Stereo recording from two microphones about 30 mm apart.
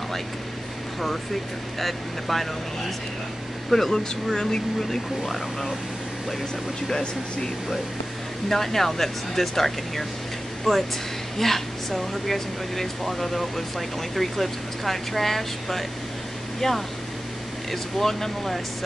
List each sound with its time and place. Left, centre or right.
1.8 s speech: centre
3.9 s speech: left
5.2 s speech: centre
8.5 s speech: centre